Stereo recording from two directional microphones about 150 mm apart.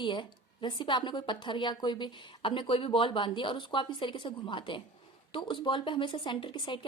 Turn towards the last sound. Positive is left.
turn(degrees=35)  # may be behind; listen again after turning